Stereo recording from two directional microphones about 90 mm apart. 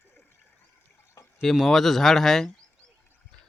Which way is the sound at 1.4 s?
Centre (ahead or behind).